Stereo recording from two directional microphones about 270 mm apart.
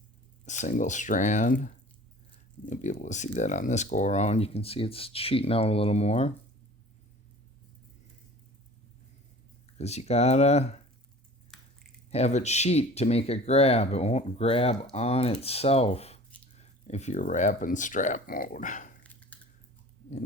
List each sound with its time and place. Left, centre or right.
0.4 s speech: left
9.7 s speech: left
11.5 s squish: centre
12.1 s speech: left
19.3 s typing: centre